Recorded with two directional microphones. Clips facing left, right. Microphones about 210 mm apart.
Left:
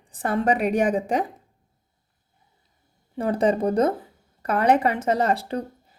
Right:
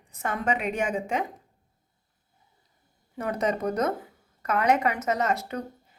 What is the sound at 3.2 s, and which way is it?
A woman's voice, 30° left (ahead or behind).